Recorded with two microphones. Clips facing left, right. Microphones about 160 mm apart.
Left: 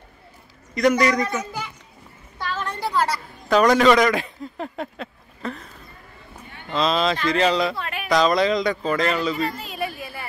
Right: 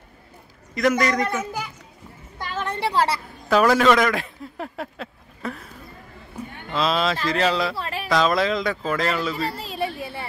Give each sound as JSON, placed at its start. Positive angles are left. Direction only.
{"t": 0.7, "sound": "a child's voice", "side_deg": 0}
{"t": 2.9, "sound": "chatter", "side_deg": -30}
{"t": 3.4, "sound": "a man's voice", "side_deg": -5}
{"t": 6.7, "sound": "speech", "side_deg": -5}
{"t": 7.7, "sound": "a sound", "side_deg": -30}
{"t": 8.1, "sound": "speech", "side_deg": 0}
{"t": 9.5, "sound": "a sound", "side_deg": -30}